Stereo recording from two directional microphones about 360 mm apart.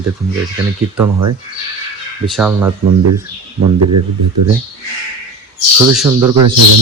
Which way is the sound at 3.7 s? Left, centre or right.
Right.